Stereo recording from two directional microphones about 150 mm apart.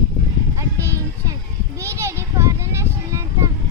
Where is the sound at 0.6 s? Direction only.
20° right (ahead or behind).